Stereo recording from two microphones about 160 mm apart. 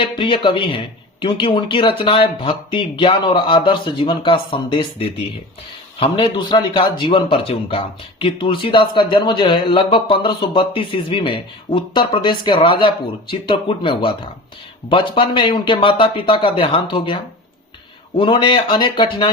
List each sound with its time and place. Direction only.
0.0 s speech: 30° left (ahead or behind)
18.2 s speech: 30° left (ahead or behind)